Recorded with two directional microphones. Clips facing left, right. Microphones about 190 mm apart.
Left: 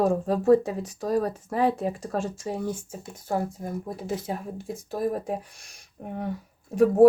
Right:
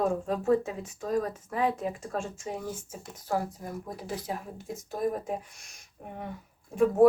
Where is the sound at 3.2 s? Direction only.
25° left (ahead or behind).